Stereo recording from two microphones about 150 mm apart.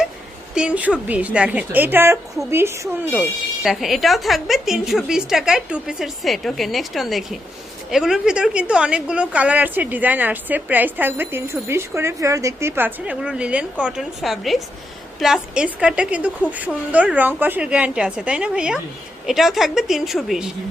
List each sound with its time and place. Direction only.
0.5 s speech: 5° right (ahead or behind)
3.1 s speech: centre (ahead or behind)